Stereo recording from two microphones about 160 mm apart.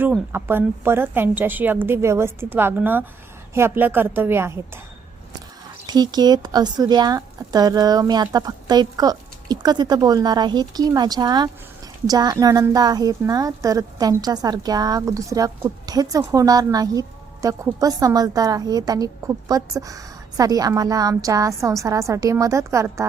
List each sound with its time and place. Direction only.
0.3 s a woman's voice: 15° right (ahead or behind)
5.8 s a woman's voice: 25° right (ahead or behind)